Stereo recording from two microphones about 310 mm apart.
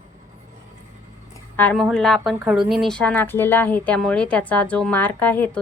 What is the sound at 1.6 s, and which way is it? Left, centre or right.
A woman's voice, centre.